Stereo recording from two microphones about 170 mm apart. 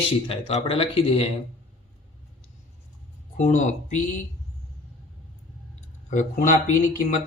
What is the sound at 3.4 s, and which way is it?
Speech, 45° left (ahead or behind).